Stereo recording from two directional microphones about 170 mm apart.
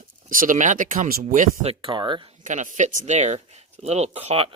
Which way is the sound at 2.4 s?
45° right (ahead or behind).